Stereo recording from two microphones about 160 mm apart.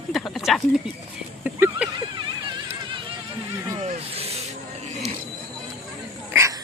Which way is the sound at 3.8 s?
40° right (ahead or behind).